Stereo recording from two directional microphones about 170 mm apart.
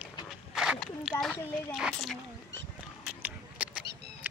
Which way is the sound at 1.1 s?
10° left (ahead or behind).